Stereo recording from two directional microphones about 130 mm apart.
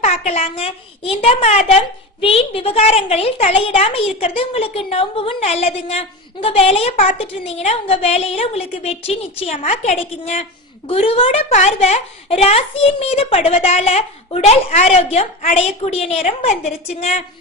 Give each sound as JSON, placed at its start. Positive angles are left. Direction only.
{"t": 0.0, "sound": "a woman's voice", "side_deg": 55}
{"t": 10.8, "sound": "a woman's voice", "side_deg": 45}
{"t": 11.5, "sound": "a woman's voice", "side_deg": 60}